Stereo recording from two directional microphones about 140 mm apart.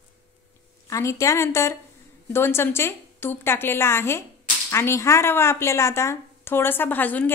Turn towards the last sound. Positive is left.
turn(degrees=10)  # may be behind; listen again after turning